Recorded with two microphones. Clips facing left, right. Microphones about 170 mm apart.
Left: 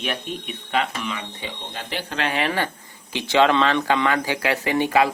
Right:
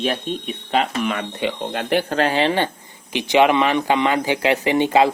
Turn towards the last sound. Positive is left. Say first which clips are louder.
# right 3 dB
turn(degrees=-20)  # may be behind; listen again after turning